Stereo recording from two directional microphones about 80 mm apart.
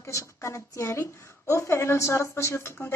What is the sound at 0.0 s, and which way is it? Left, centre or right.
A woman's voice, left.